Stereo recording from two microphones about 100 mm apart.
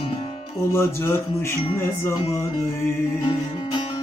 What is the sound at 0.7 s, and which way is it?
Speech, 25° left (ahead or behind).